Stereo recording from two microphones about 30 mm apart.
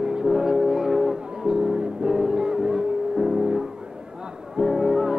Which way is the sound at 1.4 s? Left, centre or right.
Right.